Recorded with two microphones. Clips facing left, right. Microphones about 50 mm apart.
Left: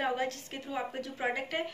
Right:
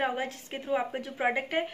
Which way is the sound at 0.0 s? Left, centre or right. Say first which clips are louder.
Right 1 dB; right.